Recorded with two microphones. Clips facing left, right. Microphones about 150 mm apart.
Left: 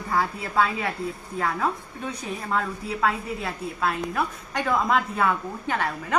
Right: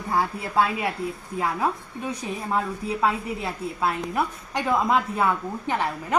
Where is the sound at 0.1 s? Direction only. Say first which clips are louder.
Right 1 dB; 20° right (ahead or behind).